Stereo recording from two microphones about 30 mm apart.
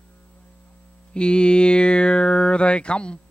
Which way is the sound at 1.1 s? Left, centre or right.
Left.